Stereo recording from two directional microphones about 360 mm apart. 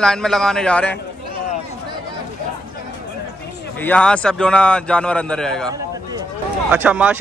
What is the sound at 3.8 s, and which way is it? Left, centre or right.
A man's voice, centre.